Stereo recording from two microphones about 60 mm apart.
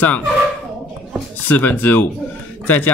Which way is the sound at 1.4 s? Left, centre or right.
Left.